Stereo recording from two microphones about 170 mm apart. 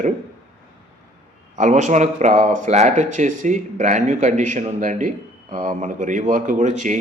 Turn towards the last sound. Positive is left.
turn(degrees=-45)  # may be behind; listen again after turning